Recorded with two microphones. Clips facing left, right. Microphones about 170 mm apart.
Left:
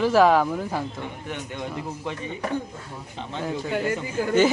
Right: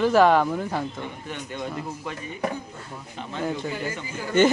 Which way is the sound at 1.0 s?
15° left (ahead or behind).